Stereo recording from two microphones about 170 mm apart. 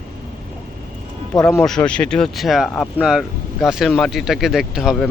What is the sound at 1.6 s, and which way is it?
Speech, 5° left (ahead or behind).